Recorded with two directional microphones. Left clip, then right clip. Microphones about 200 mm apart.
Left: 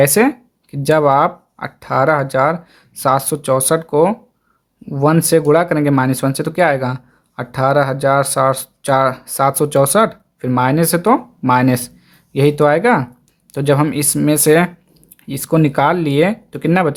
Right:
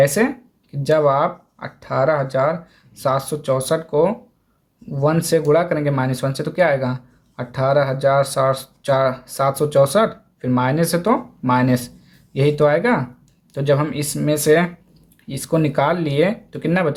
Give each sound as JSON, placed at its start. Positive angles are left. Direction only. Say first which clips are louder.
{"t": 0.0, "sound": "speech", "louder": "left 4 dB", "side_deg": 45}